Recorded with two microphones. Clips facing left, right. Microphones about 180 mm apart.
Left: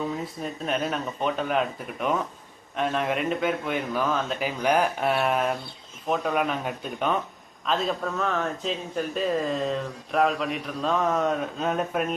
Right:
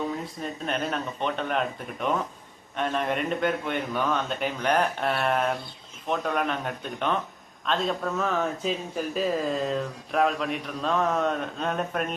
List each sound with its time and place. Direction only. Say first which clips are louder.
0.4 s speech: left 2 dB; centre (ahead or behind)